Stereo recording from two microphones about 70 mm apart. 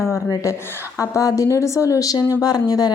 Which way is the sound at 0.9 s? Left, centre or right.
Left.